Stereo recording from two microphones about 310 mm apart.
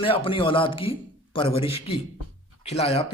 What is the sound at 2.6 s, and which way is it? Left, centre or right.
Speech, centre.